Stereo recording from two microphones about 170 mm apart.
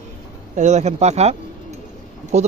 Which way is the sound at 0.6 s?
45° right (ahead or behind).